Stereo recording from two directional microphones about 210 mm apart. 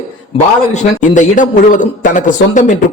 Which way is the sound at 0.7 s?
35° left (ahead or behind).